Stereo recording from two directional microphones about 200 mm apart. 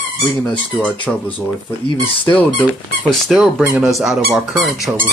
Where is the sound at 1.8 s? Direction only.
25° left (ahead or behind).